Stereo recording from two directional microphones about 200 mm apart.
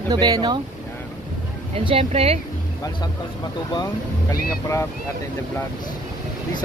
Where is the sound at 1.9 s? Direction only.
30° right (ahead or behind).